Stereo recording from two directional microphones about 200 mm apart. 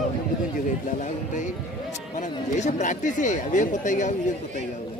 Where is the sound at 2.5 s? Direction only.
35° left (ahead or behind).